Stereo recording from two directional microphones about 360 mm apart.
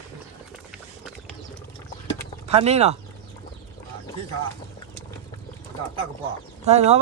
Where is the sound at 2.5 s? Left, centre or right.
Centre.